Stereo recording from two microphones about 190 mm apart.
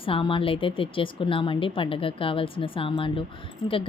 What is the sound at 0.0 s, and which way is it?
A woman's voice, 30° left (ahead or behind).